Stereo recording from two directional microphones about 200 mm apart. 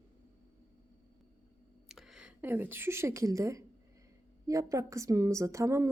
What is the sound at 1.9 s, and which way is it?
A woman's voice, centre (ahead or behind).